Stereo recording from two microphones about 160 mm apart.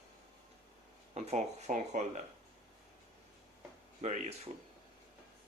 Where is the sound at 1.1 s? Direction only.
45° right (ahead or behind).